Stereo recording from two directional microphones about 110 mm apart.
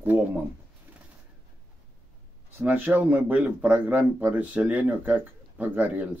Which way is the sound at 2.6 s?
15° right (ahead or behind).